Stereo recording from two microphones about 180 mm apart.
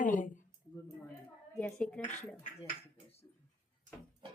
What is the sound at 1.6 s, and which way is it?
Speech, 5° left (ahead or behind).